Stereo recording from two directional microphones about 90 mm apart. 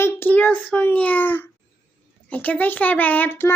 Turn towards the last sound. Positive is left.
turn(degrees=20)  # may be behind; listen again after turning